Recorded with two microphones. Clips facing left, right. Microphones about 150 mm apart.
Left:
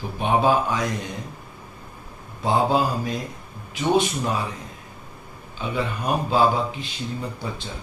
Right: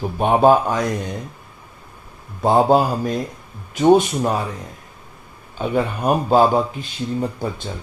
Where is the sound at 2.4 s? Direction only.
50° right (ahead or behind).